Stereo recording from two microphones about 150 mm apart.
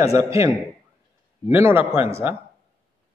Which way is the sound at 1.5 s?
15° right (ahead or behind).